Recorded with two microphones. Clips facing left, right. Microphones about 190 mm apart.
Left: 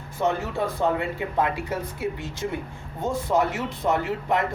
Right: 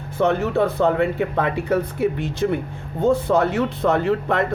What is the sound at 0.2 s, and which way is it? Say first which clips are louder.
Speech: right 6 dB; 65° right (ahead or behind).